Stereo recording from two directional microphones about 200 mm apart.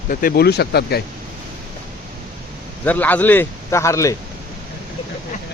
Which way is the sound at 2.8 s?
10° left (ahead or behind).